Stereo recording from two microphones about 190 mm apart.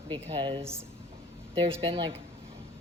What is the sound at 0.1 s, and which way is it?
Speech, 25° right (ahead or behind).